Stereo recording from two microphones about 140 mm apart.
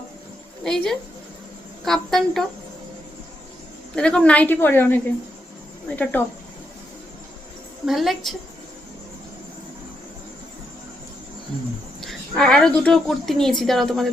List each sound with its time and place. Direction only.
0.6 s a woman's voice: 5° left (ahead or behind)
3.9 s speech: 5° left (ahead or behind)
6.0 s speech: 10° left (ahead or behind)
7.9 s a woman's voice: centre (ahead or behind)
12.0 s a woman's voice: 5° left (ahead or behind)